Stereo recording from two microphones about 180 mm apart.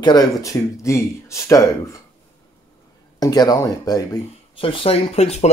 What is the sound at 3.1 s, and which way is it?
Speech, 20° left (ahead or behind).